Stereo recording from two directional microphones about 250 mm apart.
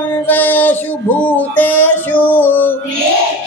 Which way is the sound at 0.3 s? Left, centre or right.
Centre.